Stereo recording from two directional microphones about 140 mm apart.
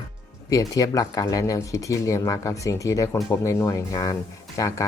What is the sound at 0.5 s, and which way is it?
Speech, 25° left (ahead or behind).